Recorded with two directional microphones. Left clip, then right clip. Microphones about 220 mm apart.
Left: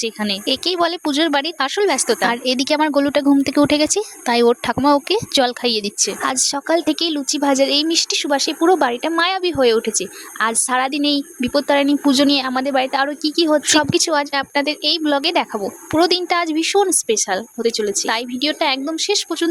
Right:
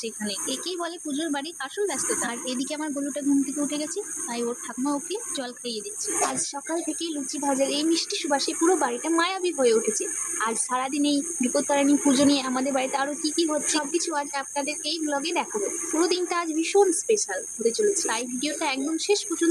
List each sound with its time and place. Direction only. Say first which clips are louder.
0.0 s speech: left 10 dB; 50° left (ahead or behind)